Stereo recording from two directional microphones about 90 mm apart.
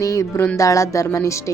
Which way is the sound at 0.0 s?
35° left (ahead or behind).